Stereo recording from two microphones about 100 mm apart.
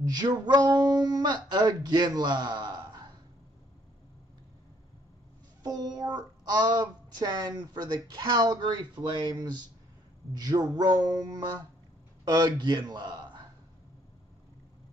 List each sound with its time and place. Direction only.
0.0 s speech: 45° right (ahead or behind)
5.6 s speech: 40° right (ahead or behind)